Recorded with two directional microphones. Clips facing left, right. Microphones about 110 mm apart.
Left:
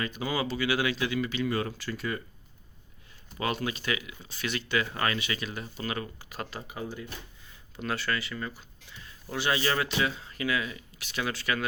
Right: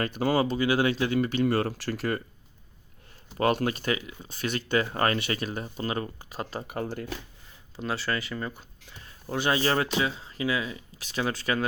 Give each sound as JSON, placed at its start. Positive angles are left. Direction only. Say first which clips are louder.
{"t": 0.0, "sound": "speech", "louder": "right 6 dB", "side_deg": -60}
{"t": 0.5, "sound": "speech", "louder": "right 4 dB", "side_deg": -35}
{"t": 3.3, "sound": "speech", "louder": "right 6 dB", "side_deg": -50}
{"t": 7.8, "sound": "speech", "louder": "right 1 dB", "side_deg": -30}